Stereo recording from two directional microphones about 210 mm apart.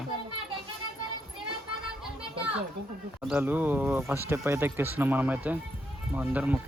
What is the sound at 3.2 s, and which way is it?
Speech, 5° right (ahead or behind).